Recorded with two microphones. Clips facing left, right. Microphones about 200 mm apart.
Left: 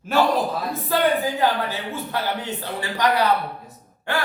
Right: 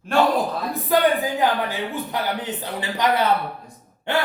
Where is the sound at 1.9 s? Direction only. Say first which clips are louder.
Right 1 dB; 20° right (ahead or behind).